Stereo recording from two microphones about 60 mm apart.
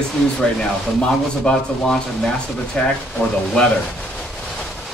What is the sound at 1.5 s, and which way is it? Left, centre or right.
A man's voice, centre.